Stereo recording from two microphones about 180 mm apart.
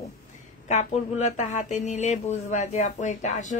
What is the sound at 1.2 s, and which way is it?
A woman's voice, 40° left (ahead or behind).